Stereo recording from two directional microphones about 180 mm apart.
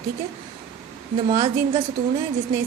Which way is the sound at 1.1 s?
30° right (ahead or behind).